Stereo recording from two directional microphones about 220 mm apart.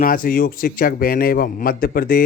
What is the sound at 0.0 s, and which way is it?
A man's voice, 40° left (ahead or behind).